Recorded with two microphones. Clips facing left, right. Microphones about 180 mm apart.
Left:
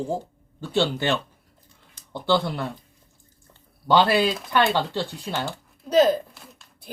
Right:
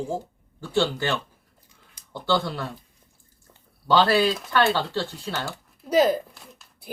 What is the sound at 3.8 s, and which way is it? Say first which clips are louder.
Speech: even; 15° left (ahead or behind).